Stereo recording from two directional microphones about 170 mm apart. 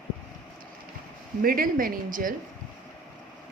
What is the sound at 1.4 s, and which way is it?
Speech, 55° right (ahead or behind).